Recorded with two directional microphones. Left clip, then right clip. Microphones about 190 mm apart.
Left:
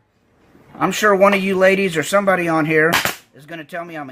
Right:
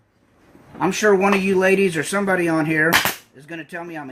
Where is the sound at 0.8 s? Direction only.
45° left (ahead or behind).